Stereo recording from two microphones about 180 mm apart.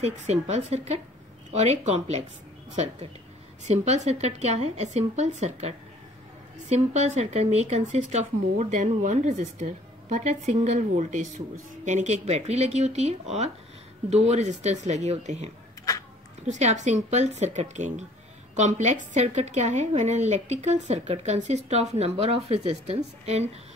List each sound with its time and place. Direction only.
0.0 s speech: 35° right (ahead or behind)